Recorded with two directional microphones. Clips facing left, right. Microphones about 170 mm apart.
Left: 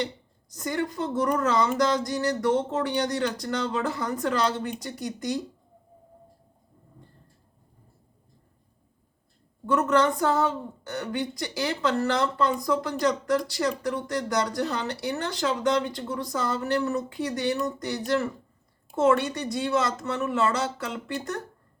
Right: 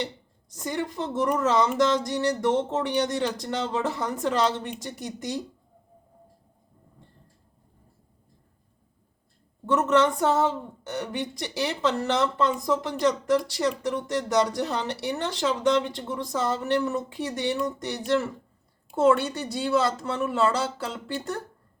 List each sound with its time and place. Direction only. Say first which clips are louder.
0.5 s speech: left 1 dB; 25° right (ahead or behind)
9.6 s speech: right 1 dB; 25° right (ahead or behind)